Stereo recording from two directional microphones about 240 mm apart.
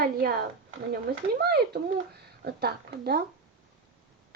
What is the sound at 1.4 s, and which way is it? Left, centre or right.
A child's voice, right.